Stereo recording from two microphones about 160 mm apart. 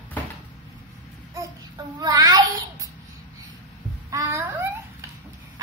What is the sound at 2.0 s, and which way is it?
Child singing, 25° right (ahead or behind).